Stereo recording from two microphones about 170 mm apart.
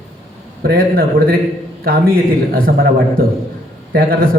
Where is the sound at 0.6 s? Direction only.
60° right (ahead or behind).